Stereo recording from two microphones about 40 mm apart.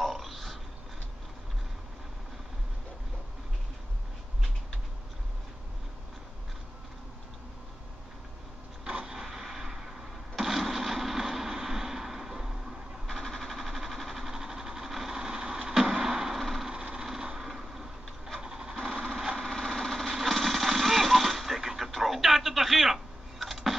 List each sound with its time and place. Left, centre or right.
0.0 s a sound: centre
9.0 s vehicle: centre
10.3 s artillery fire: centre
13.0 s vehicle: centre
14.3 s vehicle: centre
16.3 s vehicle: centre
16.6 s vehicle: right
17.1 s a sound: centre
18.4 s sewing machine: centre
19.4 s engine: centre
20.2 s a sound: centre
23.4 s vehicle: centre